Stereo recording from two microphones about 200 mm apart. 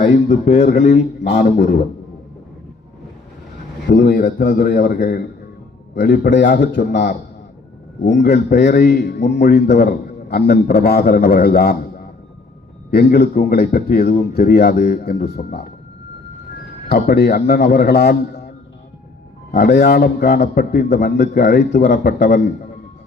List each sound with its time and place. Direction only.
0.4 s a man's voice: 35° left (ahead or behind)
3.8 s a man's voice: 50° left (ahead or behind)
8.3 s a man's voice: 55° left (ahead or behind)
16.9 s a man's voice: 55° left (ahead or behind)